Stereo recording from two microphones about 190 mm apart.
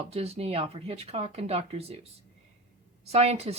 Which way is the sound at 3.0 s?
35° right (ahead or behind).